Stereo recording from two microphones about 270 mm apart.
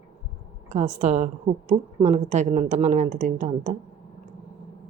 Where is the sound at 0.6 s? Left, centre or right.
Right.